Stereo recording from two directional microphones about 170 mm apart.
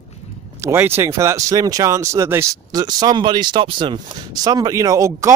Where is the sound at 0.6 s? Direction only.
15° right (ahead or behind).